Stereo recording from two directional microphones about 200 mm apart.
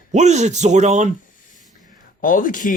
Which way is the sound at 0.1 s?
35° right (ahead or behind).